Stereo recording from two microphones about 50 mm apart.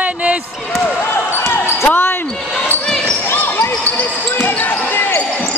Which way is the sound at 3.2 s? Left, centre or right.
Left.